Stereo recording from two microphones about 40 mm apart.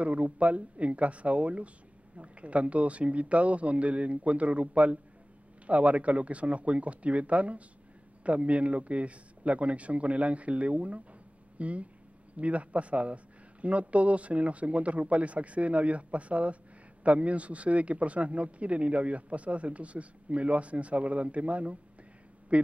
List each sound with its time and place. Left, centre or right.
0.0 s a man's voice: right